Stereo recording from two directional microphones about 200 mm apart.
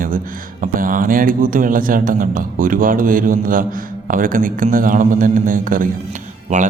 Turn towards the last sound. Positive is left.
turn(degrees=-35)  # may be behind; listen again after turning